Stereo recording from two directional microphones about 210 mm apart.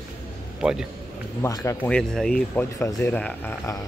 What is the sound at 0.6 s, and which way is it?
Speech, 5° right (ahead or behind).